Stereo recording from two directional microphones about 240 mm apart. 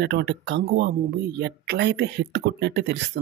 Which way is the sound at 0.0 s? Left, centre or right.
Right.